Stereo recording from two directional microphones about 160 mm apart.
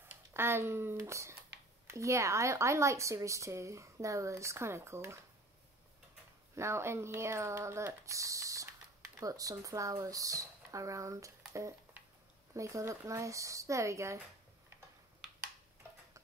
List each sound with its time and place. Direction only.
0.3 s speech: 15° right (ahead or behind)
6.5 s speech: 15° right (ahead or behind)
11.5 s a sound: 20° right (ahead or behind)
12.5 s speech: 20° right (ahead or behind)